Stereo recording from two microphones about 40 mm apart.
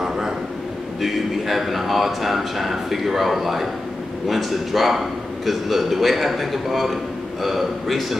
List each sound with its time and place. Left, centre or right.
1.0 s a man's voice: centre